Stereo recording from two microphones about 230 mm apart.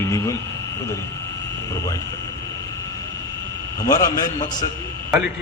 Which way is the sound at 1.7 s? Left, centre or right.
Centre.